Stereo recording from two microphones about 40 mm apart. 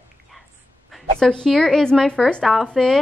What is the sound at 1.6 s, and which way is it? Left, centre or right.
Speech, centre.